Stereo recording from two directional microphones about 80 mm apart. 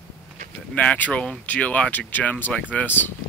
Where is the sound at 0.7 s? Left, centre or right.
Centre.